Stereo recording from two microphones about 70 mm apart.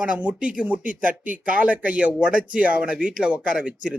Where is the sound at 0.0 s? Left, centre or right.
Centre.